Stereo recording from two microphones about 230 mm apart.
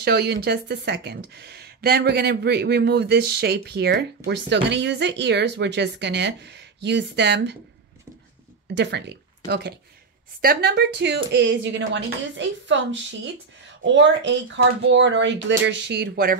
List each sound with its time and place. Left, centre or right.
0.0 s speech: right
8.7 s speech: right